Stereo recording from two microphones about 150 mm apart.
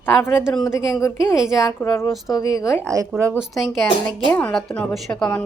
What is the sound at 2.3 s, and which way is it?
Speech, 25° left (ahead or behind).